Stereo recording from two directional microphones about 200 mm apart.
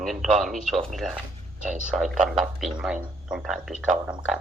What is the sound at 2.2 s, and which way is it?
Speech, centre (ahead or behind).